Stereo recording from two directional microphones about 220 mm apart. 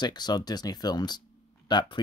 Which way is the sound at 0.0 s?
20° left (ahead or behind).